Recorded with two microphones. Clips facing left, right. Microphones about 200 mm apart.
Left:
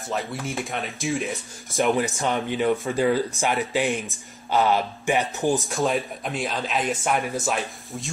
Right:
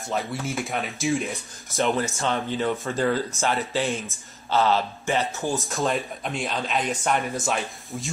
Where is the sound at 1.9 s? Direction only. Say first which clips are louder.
Left 2 dB; 15° left (ahead or behind).